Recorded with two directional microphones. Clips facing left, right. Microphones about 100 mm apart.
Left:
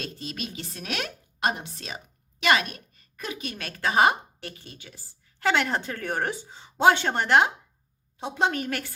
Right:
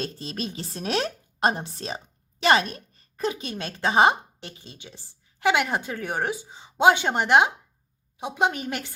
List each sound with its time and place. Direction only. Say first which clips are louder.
0.0 s a woman's voice: right 4 dB; 35° right (ahead or behind); by 8.9 s 20° right (ahead or behind)